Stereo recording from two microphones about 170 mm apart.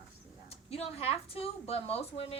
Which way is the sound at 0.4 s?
35° left (ahead or behind).